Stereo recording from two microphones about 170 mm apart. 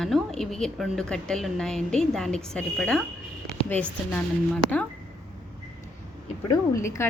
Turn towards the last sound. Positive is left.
turn(degrees=15)  # may be behind; listen again after turning